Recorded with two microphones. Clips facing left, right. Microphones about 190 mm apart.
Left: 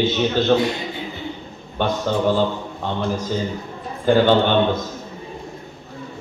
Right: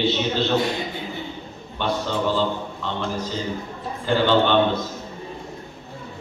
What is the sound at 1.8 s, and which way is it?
Speech, 50° left (ahead or behind).